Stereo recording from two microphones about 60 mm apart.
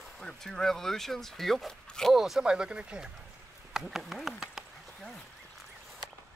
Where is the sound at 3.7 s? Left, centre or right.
Centre.